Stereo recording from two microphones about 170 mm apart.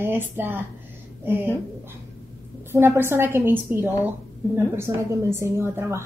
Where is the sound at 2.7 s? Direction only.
15° right (ahead or behind).